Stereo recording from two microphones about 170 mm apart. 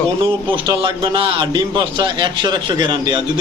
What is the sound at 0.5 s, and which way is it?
A man's voice, 30° right (ahead or behind).